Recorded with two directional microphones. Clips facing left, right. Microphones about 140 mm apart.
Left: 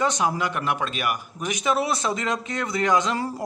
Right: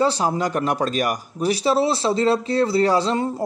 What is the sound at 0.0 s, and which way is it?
Speech, 35° right (ahead or behind).